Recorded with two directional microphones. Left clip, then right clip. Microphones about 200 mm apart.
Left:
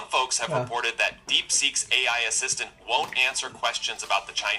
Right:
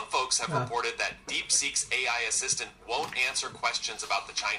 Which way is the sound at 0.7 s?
25° left (ahead or behind).